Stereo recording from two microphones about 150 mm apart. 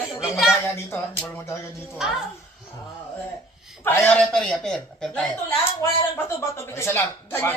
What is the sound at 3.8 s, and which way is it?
Female singing, 15° left (ahead or behind).